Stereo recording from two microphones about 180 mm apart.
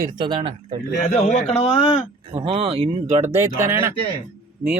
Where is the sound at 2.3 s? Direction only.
35° right (ahead or behind).